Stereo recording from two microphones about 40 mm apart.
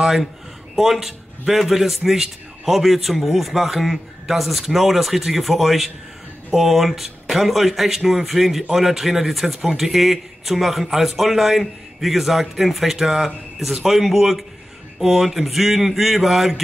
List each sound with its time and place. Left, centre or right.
0.0 s a man's voice: centre